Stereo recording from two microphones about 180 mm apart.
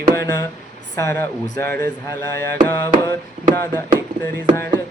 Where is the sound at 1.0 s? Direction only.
15° left (ahead or behind).